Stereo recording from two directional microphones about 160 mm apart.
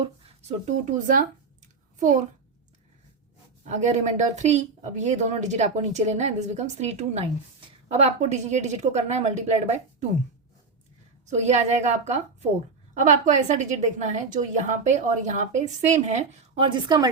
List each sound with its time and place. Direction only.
0.0 s speech: 45° right (ahead or behind)
1.6 s a sound: 50° right (ahead or behind)
3.7 s a woman's voice: 45° right (ahead or behind)
11.3 s a woman's voice: 45° right (ahead or behind)
16.6 s a woman's voice: 30° right (ahead or behind)